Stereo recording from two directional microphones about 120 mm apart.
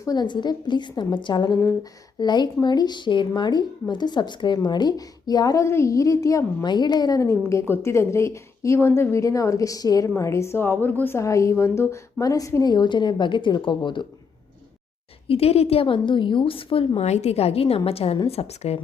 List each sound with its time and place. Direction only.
0.0 s a woman's voice: 35° left (ahead or behind)
12.7 s a woman's voice: 40° left (ahead or behind)
15.3 s a woman's voice: 55° left (ahead or behind)
17.0 s a woman's voice: 65° left (ahead or behind)